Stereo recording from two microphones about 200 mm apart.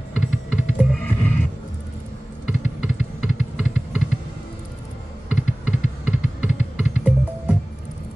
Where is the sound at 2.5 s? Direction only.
5° right (ahead or behind).